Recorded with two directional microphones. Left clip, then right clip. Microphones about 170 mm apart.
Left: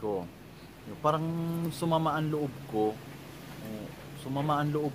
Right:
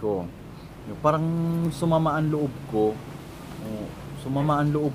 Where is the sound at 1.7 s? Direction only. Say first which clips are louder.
Right 5 dB; 5° left (ahead or behind).